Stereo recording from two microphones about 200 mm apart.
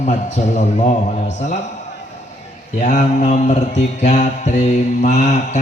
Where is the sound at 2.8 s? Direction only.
40° left (ahead or behind).